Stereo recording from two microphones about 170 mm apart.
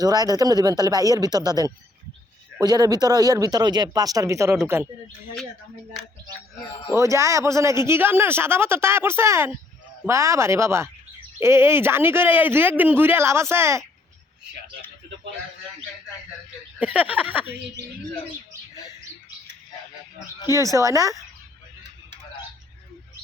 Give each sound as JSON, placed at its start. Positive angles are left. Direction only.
{"t": 0.0, "sound": "speech", "side_deg": -20}
{"t": 6.9, "sound": "speech", "side_deg": -15}
{"t": 16.8, "sound": "speech", "side_deg": -10}
{"t": 20.7, "sound": "speech", "side_deg": -20}